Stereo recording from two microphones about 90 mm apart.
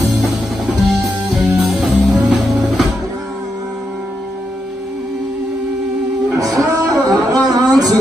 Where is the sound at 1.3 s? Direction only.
5° right (ahead or behind).